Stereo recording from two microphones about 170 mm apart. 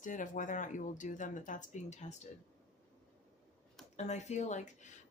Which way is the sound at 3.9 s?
40° left (ahead or behind).